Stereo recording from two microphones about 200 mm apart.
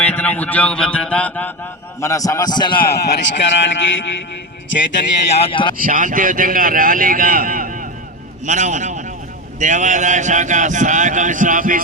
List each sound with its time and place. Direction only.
0.0 s a man's voice: 10° left (ahead or behind)
2.7 s speech: 50° left (ahead or behind)
5.3 s speech: 30° left (ahead or behind)
5.7 s speech: 45° right (ahead or behind)